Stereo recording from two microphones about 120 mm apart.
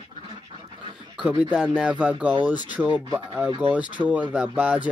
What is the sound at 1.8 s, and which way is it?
Speech, 10° right (ahead or behind).